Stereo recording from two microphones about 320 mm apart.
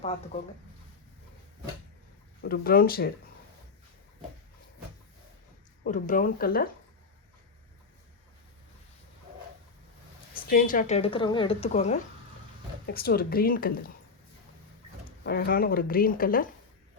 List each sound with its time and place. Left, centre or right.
2.4 s a woman's voice: left
5.8 s a woman's voice: left
10.5 s a woman's voice: left
15.2 s a woman's voice: left